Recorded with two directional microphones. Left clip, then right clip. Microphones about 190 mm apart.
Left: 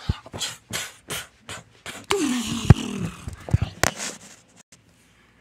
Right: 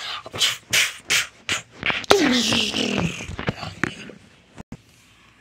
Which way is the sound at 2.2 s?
40° left (ahead or behind).